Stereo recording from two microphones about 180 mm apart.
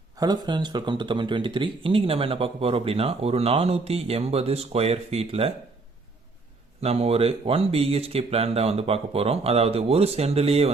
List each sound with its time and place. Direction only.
0.2 s speech: 25° right (ahead or behind)
6.8 s speech: 35° right (ahead or behind)